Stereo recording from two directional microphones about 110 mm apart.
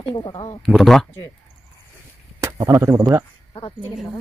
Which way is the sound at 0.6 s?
5° left (ahead or behind).